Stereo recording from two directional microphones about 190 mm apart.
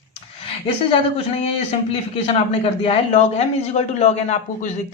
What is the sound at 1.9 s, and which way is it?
A man's voice, 30° left (ahead or behind).